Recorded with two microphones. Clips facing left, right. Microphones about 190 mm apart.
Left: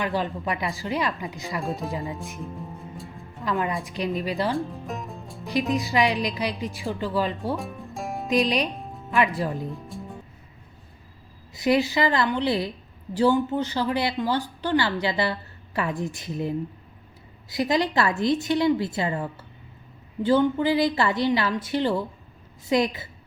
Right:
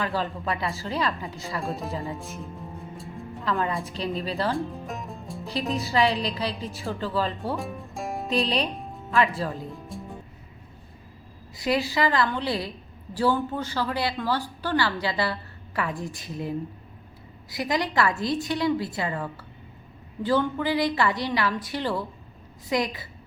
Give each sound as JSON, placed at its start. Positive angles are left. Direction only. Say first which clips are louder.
{"t": 0.0, "sound": "a woman's voice", "louder": "left 2 dB", "side_deg": 15}
{"t": 3.4, "sound": "a woman's voice", "louder": "left 1 dB", "side_deg": 15}
{"t": 4.5, "sound": "music", "louder": "left 1 dB", "side_deg": 0}
{"t": 5.5, "sound": "a woman's voice", "louder": "left 4 dB", "side_deg": 15}
{"t": 7.5, "sound": "music", "louder": "left 1 dB", "side_deg": 0}
{"t": 8.3, "sound": "a woman's voice", "louder": "left 3 dB", "side_deg": 15}
{"t": 8.7, "sound": "music", "louder": "even", "side_deg": 0}
{"t": 9.1, "sound": "a woman's voice", "louder": "left 1 dB", "side_deg": 15}
{"t": 9.7, "sound": "music", "louder": "left 1 dB", "side_deg": 0}
{"t": 11.5, "sound": "speech", "louder": "left 4 dB", "side_deg": 20}